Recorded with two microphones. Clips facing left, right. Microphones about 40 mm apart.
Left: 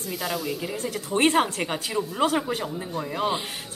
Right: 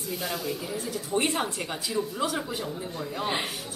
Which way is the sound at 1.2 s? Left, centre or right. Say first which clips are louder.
Left 10 dB; left.